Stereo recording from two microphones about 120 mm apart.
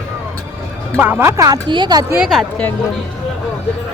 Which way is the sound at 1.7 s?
40° right (ahead or behind).